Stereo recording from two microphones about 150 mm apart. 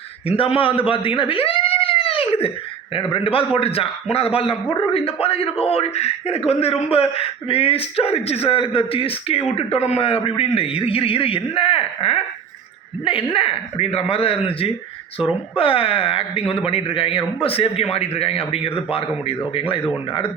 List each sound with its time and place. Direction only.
0.3 s a man's voice: 35° left (ahead or behind)